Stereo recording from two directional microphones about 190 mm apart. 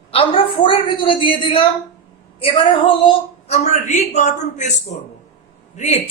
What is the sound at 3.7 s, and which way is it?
A woman's voice, 35° left (ahead or behind).